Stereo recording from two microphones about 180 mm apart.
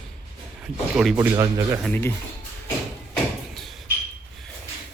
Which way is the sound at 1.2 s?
15° right (ahead or behind).